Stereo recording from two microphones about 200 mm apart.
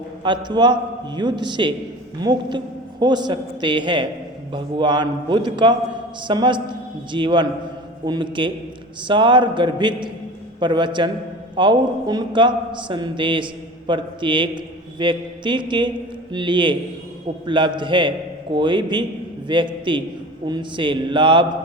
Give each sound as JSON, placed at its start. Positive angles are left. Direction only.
{"t": 0.2, "sound": "a man's voice", "side_deg": -20}